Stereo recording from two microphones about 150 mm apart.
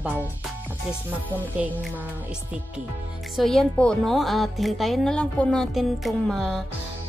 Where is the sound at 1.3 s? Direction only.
10° right (ahead or behind).